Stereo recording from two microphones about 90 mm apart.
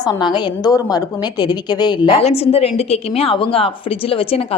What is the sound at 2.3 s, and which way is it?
A woman's voice, 90° left.